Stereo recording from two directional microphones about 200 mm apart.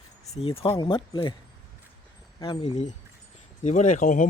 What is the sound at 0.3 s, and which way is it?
Speech, 30° left (ahead or behind).